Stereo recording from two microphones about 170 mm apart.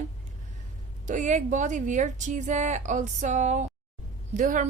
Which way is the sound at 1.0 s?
45° right (ahead or behind).